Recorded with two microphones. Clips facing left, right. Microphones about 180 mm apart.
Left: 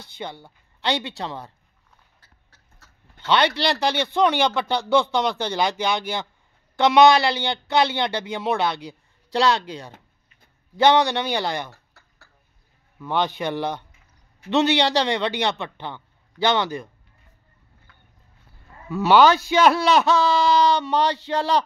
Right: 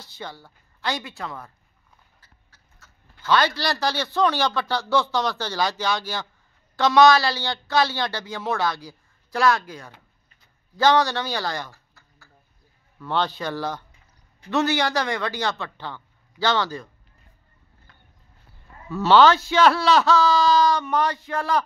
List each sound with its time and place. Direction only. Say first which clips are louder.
0.2 s a man's voice: left 3 dB; 20° left (ahead or behind)
3.3 s a man's voice: left 1 dB; 25° left (ahead or behind)
13.0 s a man's voice: left 2 dB; 15° left (ahead or behind)
18.9 s a man's voice: even; 10° left (ahead or behind); by 21.6 s 30° left (ahead or behind)